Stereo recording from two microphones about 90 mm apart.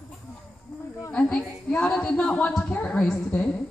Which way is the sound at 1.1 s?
15° left (ahead or behind).